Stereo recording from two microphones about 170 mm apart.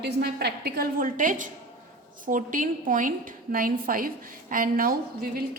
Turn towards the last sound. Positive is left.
turn(degrees=-60)  # may be behind; listen again after turning